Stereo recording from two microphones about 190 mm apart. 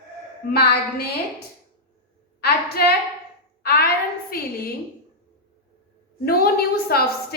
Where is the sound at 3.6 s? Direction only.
55° left (ahead or behind).